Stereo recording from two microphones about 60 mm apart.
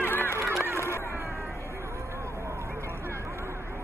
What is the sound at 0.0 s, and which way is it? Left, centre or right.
Honk, left.